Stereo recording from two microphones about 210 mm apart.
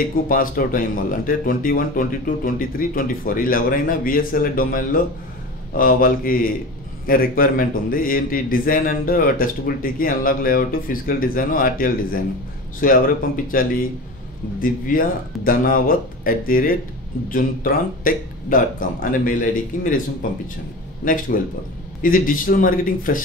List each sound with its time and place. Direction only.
0.3 s a man's voice: 40° left (ahead or behind)